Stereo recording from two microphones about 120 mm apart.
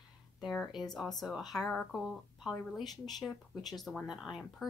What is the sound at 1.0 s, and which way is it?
Speech, 5° left (ahead or behind).